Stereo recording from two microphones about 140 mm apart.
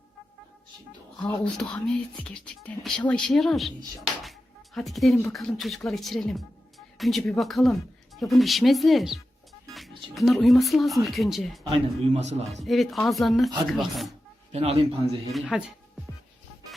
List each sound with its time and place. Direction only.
1.2 s speech: 10° left (ahead or behind)
4.0 s music: centre (ahead or behind)
5.3 s speech: centre (ahead or behind)
11.7 s a man's voice: 50° right (ahead or behind)
12.6 s speech: centre (ahead or behind)
14.5 s a man's voice: 50° right (ahead or behind)
15.3 s speech: centre (ahead or behind)